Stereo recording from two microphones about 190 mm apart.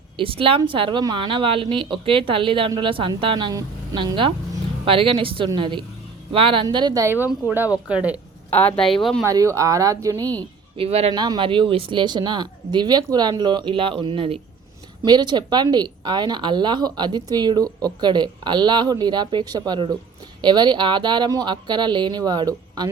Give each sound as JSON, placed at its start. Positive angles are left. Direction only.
{"t": 0.2, "sound": "speech", "side_deg": -30}
{"t": 8.4, "sound": "speech", "side_deg": 10}
{"t": 9.2, "sound": "speech", "side_deg": -15}
{"t": 10.8, "sound": "speech", "side_deg": -30}